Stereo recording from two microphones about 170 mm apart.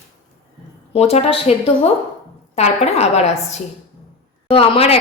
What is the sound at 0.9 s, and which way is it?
A woman's voice, 40° left (ahead or behind).